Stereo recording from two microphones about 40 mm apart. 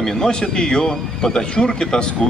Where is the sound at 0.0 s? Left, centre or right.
Centre.